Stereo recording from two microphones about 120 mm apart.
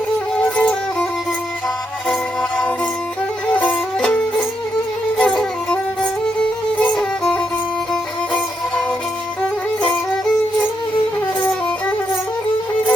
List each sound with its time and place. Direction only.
0.5 s music: 5° left (ahead or behind)
2.0 s music: centre (ahead or behind)
6.7 s violin: 5° left (ahead or behind)